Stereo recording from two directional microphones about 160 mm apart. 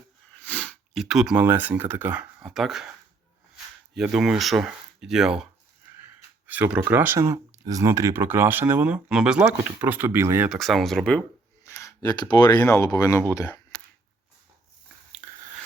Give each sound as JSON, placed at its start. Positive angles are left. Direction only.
{"t": 0.3, "sound": "sneeze", "side_deg": 10}
{"t": 1.0, "sound": "speech", "side_deg": -5}
{"t": 3.9, "sound": "speech", "side_deg": -5}
{"t": 6.5, "sound": "speech", "side_deg": -10}
{"t": 10.5, "sound": "speech", "side_deg": 0}
{"t": 11.6, "sound": "speech", "side_deg": 20}
{"t": 15.2, "sound": "biting", "side_deg": -10}